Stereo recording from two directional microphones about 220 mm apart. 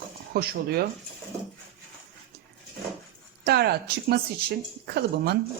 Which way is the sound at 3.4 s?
45° right (ahead or behind).